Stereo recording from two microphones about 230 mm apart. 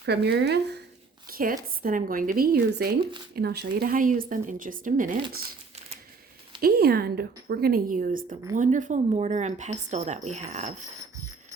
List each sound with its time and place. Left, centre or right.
0.0 s a woman's voice: right
6.6 s a woman's voice: right